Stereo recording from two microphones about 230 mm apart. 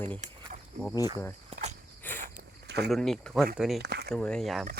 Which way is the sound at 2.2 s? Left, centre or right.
Right.